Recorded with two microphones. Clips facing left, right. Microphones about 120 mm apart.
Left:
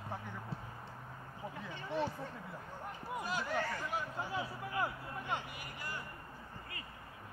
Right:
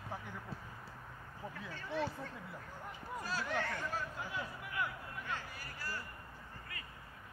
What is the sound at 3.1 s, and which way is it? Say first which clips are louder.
Speech: left 2 dB; 20° left (ahead or behind).